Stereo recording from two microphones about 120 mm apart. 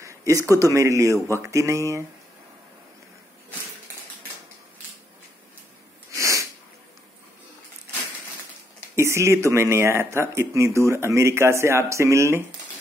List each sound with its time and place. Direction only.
0.0 s speech: 25° right (ahead or behind)
6.1 s sneeze: 25° right (ahead or behind)
8.9 s speech: 25° right (ahead or behind)